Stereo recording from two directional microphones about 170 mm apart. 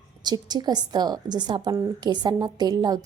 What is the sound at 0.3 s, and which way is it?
A woman's voice, 25° right (ahead or behind).